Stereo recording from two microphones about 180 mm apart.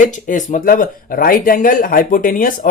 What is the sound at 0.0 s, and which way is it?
Speech, 45° left (ahead or behind).